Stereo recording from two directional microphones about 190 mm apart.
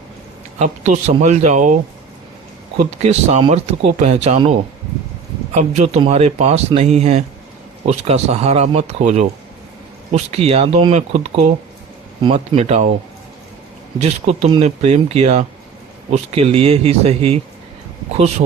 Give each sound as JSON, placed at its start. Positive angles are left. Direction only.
{"t": 0.6, "sound": "speech", "side_deg": -35}
{"t": 3.0, "sound": "speech", "side_deg": -35}
{"t": 5.5, "sound": "speech", "side_deg": -35}
{"t": 14.0, "sound": "speech", "side_deg": -35}